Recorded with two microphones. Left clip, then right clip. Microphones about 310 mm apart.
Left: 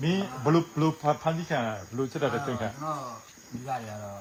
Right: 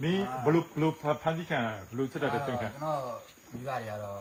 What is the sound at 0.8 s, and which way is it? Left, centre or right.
Speech, centre.